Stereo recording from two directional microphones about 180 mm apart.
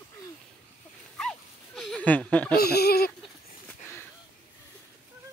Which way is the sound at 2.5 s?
60° left (ahead or behind).